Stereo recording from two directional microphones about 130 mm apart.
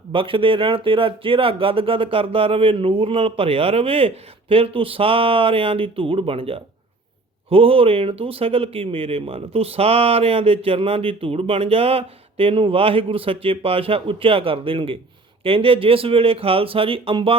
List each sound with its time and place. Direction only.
0.1 s speech: 40° right (ahead or behind)